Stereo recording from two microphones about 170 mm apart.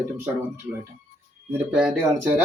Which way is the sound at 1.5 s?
5° right (ahead or behind).